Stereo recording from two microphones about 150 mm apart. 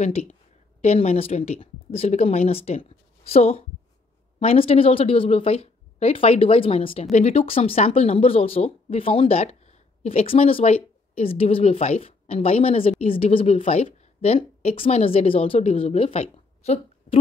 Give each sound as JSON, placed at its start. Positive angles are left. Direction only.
{"t": 0.0, "sound": "a woman's voice", "side_deg": 45}